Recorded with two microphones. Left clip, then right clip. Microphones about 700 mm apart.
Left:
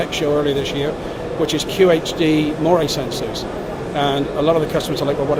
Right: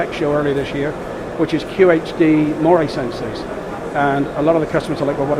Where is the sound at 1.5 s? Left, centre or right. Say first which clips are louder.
Right 1 dB; right.